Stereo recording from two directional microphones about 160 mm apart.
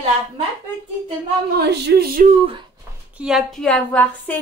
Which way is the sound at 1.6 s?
85° right.